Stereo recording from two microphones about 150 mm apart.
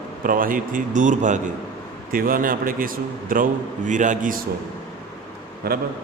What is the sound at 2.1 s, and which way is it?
A man's voice, 70° right (ahead or behind).